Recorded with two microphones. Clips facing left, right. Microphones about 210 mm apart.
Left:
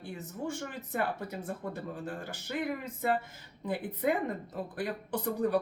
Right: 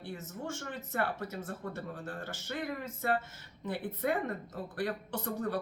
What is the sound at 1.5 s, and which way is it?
Speech, 15° left (ahead or behind).